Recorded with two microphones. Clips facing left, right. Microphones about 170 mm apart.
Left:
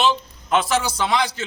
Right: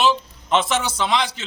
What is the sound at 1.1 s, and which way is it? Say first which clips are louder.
Speech: left 1 dB; 20° right (ahead or behind).